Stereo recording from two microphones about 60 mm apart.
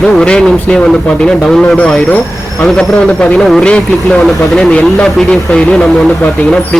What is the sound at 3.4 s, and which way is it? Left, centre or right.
Speech, centre.